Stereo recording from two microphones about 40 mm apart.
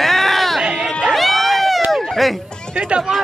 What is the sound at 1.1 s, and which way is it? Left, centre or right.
Run, centre.